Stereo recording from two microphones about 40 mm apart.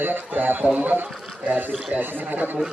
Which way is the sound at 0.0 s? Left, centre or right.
Right.